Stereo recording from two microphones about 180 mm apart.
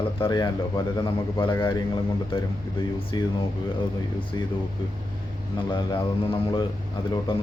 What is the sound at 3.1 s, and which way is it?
Speech, 25° left (ahead or behind).